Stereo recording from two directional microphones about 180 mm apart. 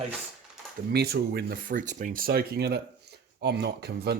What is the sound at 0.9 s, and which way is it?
Speech, 60° right (ahead or behind).